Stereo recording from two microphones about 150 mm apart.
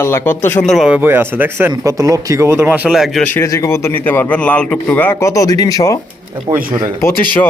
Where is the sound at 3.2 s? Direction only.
20° left (ahead or behind).